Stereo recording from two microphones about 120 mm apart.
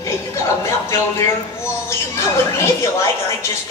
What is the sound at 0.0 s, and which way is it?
Speech, 25° left (ahead or behind).